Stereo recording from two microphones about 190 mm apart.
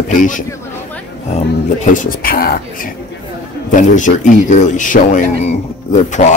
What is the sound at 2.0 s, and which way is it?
Speech, 50° left (ahead or behind).